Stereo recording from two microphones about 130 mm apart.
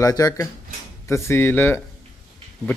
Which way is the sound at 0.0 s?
25° left (ahead or behind).